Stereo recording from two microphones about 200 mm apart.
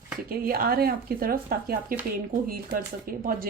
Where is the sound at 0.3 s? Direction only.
45° right (ahead or behind).